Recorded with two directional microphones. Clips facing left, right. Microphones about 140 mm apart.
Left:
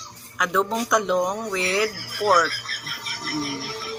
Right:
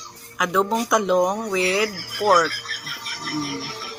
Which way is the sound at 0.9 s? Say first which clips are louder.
Right 1 dB; 5° right (ahead or behind).